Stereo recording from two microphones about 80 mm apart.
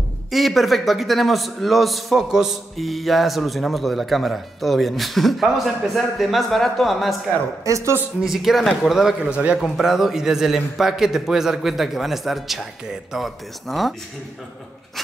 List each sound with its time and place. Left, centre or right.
0.3 s a man's voice: centre
7.6 s speech: right
8.2 s a man's voice: centre